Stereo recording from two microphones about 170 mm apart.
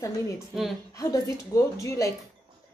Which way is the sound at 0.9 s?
20° left (ahead or behind).